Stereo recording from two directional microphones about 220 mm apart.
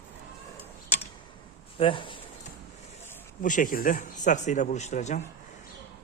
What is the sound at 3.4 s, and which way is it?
A man's voice, 35° left (ahead or behind).